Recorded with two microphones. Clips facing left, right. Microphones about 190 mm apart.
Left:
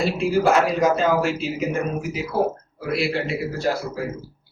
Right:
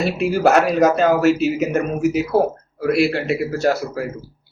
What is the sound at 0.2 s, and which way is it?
Speech, 70° right (ahead or behind).